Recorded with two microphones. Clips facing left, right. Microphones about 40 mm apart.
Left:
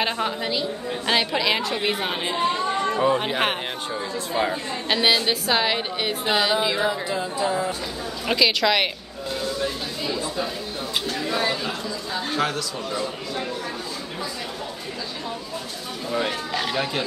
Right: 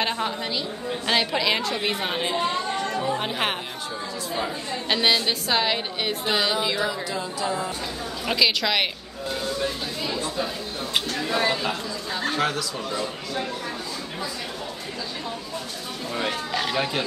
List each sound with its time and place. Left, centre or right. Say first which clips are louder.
0.0 s a woman's voice: left 1 dB; centre
2.8 s chatter: left 5 dB; left
4.3 s speech: left 5 dB; left
4.8 s a woman's voice: left 1 dB; centre
8.3 s a woman's voice: left 2 dB; centre
9.3 s a sound: left 1 dB; centre
11.1 s a woman's voice: even; centre
16.1 s a woman's voice: left 2 dB; centre